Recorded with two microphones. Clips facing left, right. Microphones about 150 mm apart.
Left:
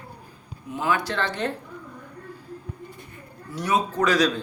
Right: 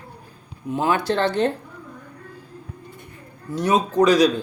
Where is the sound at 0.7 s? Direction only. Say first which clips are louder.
Right 5 dB; 30° right (ahead or behind).